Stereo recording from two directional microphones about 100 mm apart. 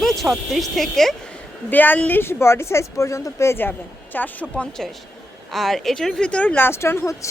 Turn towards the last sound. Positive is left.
turn(degrees=30)  # may be behind; listen again after turning